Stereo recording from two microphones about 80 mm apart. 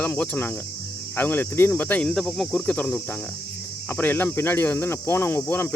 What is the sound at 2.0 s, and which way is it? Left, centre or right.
Speech, centre.